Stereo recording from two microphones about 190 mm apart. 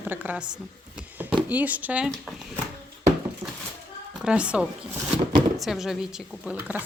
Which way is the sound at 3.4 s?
5° right (ahead or behind).